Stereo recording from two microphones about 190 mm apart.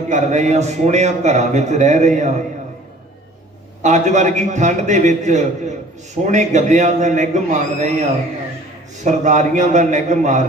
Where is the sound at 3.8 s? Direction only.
40° right (ahead or behind).